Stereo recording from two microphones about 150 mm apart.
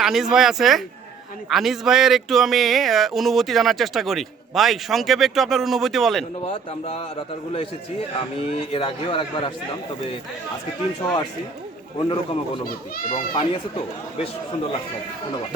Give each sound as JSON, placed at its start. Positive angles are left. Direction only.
{"t": 0.0, "sound": "speech", "side_deg": -5}
{"t": 6.4, "sound": "speech", "side_deg": 40}
{"t": 8.4, "sound": "speech", "side_deg": 40}
{"t": 11.9, "sound": "speech", "side_deg": 40}
{"t": 12.6, "sound": "a child's voice", "side_deg": 70}
{"t": 13.3, "sound": "speech", "side_deg": 35}